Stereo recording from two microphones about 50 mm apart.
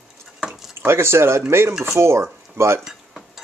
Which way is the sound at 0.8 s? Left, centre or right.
Right.